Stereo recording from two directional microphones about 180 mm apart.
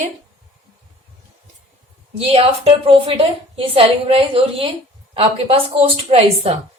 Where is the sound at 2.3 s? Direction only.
35° right (ahead or behind).